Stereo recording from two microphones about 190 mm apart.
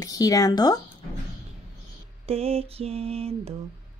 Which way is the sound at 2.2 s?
30° right (ahead or behind).